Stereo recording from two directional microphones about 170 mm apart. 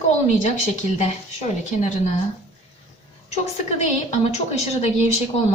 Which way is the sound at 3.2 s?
40° left (ahead or behind).